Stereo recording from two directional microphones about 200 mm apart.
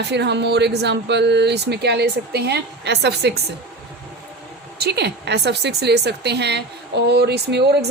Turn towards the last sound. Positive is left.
turn(degrees=-55)  # may be behind; listen again after turning